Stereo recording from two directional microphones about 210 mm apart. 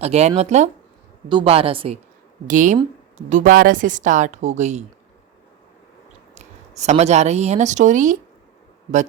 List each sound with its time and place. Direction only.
0.0 s a woman's voice: 30° right (ahead or behind)
2.5 s speech: 35° right (ahead or behind)
6.3 s speech: 35° right (ahead or behind)